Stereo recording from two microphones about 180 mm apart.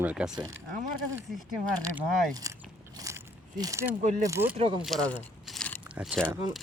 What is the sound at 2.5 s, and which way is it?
Biting, 20° right (ahead or behind).